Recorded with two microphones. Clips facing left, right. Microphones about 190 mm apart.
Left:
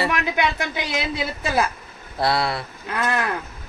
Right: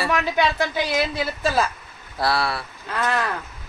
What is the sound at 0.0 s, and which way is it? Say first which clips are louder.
A woman's voice: right 1 dB; 15° left (ahead or behind).